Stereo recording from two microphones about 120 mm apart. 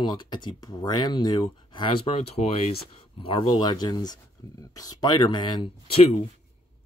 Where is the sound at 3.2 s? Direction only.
40° left (ahead or behind).